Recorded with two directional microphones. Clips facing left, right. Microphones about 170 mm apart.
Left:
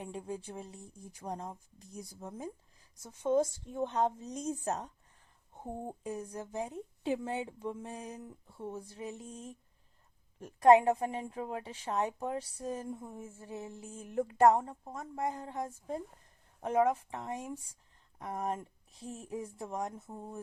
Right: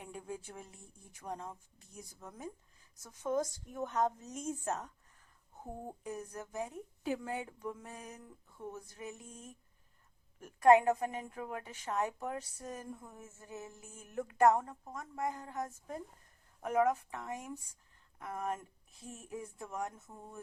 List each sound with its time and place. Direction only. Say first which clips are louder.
0.0 s a woman's voice: left 4 dB; 30° left (ahead or behind)